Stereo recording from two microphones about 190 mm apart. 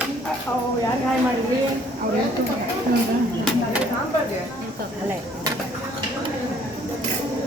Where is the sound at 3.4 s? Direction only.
5° right (ahead or behind).